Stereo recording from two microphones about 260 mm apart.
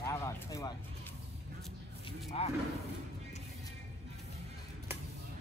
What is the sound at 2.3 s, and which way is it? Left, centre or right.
Speech, left.